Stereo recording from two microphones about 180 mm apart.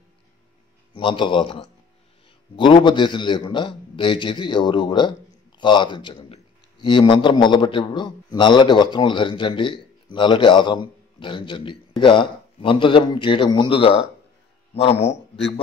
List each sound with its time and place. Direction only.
0.9 s a man's voice: 25° left (ahead or behind)